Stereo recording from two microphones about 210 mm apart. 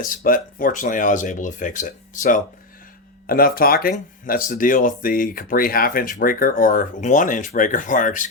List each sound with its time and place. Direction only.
0.0 s speech: 40° left (ahead or behind)